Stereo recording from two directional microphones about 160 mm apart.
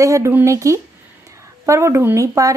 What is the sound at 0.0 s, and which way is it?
A woman's voice, 20° right (ahead or behind).